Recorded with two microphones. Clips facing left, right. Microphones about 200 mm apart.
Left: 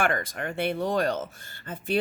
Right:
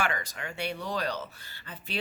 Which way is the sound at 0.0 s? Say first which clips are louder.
Left 5 dB; 50° left (ahead or behind).